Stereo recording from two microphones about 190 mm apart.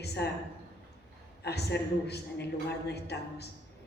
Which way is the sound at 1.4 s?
60° left (ahead or behind).